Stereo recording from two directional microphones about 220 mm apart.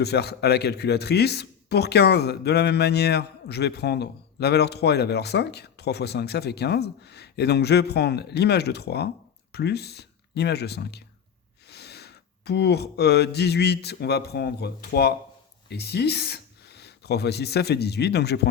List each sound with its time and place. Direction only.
0.0 s a man's voice: 50° left (ahead or behind)
11.7 s a sound: 50° left (ahead or behind)
15.7 s speech: 50° left (ahead or behind)